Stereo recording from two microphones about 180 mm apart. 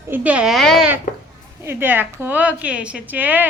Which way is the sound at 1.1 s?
45° left (ahead or behind).